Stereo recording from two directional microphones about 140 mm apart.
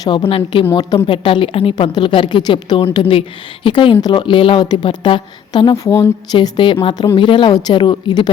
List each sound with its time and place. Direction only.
0.0 s a woman's voice: 35° left (ahead or behind)